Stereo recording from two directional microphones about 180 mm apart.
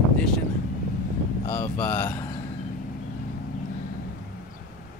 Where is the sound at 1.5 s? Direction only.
10° left (ahead or behind).